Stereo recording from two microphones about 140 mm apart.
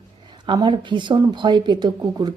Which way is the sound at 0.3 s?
35° right (ahead or behind).